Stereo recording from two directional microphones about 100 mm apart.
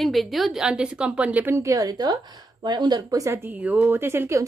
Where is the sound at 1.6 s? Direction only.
30° right (ahead or behind).